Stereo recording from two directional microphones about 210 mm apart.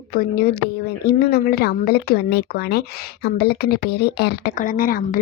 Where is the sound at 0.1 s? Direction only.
45° left (ahead or behind).